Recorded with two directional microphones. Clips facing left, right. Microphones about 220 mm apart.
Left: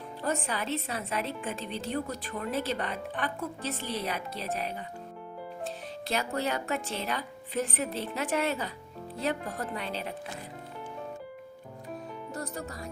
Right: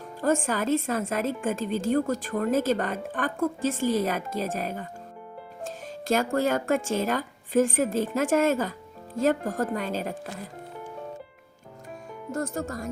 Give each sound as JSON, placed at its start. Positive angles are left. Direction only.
{"t": 0.2, "sound": "a woman's voice", "side_deg": -45}
{"t": 5.6, "sound": "music", "side_deg": -45}
{"t": 6.3, "sound": "a woman's voice", "side_deg": -45}
{"t": 12.3, "sound": "a woman's voice", "side_deg": -45}